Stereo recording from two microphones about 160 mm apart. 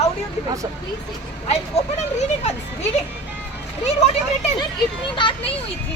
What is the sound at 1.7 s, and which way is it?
Speech, 45° left (ahead or behind).